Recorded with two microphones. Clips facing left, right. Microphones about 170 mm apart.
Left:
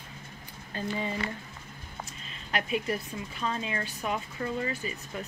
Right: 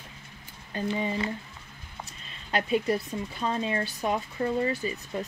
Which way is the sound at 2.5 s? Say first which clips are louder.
Right 5 dB; 30° right (ahead or behind).